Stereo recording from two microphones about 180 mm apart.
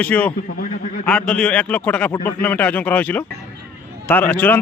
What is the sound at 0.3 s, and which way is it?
Speech, 50° left (ahead or behind).